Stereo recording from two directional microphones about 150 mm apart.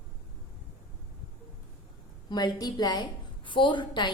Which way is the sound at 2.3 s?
30° left (ahead or behind).